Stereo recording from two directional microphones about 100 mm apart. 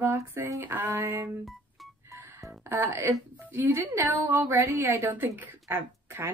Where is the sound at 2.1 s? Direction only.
30° right (ahead or behind).